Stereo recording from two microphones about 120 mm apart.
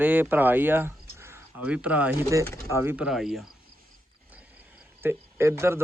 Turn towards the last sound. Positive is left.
turn(degrees=-20)  # may be behind; listen again after turning